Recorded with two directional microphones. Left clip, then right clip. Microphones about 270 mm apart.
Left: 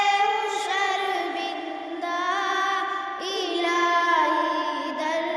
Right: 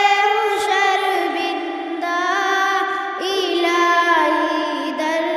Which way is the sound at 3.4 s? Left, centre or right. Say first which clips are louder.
Right 6 dB; right.